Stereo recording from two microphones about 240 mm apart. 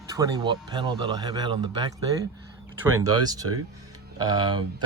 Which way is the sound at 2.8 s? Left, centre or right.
Right.